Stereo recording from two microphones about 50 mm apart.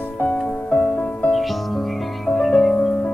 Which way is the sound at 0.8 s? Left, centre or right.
Left.